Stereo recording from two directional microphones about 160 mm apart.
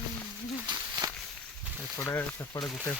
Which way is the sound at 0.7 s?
25° right (ahead or behind).